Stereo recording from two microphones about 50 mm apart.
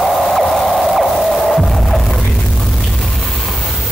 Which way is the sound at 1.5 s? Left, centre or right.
Centre.